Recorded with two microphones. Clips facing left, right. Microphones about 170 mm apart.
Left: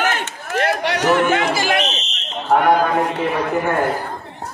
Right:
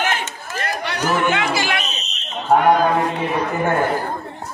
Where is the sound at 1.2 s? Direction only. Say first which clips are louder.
Left 2 dB; 45° left (ahead or behind).